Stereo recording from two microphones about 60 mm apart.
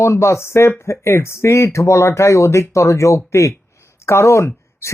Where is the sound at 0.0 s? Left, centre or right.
Left.